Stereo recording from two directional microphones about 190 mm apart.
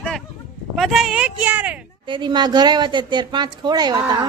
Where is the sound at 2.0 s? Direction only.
25° right (ahead or behind).